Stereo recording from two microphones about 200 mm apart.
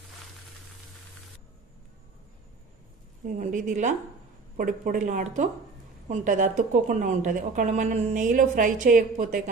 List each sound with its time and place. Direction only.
3.3 s a woman's voice: 40° right (ahead or behind)